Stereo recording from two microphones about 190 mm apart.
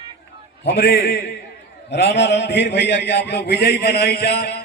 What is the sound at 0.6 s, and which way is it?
A man's voice, 55° left (ahead or behind).